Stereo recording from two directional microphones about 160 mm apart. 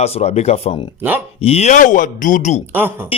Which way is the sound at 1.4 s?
40° left (ahead or behind).